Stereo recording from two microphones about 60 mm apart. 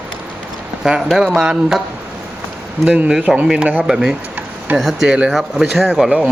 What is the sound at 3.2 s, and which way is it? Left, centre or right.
Speech, centre.